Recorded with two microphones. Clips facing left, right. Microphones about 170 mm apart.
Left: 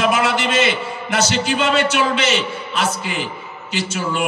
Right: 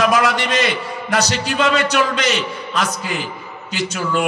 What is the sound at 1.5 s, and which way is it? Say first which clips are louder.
Speech: right 2 dB; 30° left (ahead or behind).